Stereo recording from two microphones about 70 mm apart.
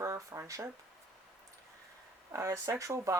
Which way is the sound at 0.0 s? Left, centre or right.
Right.